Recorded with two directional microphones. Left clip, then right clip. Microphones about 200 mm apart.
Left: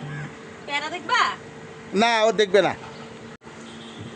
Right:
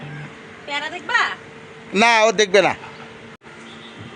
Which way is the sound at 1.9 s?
25° right (ahead or behind).